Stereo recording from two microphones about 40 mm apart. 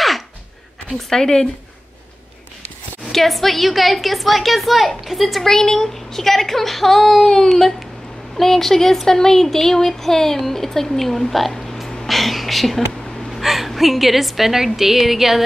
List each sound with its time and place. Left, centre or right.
0.9 s speech: centre
3.1 s a woman's voice: centre
5.4 s a woman's voice: centre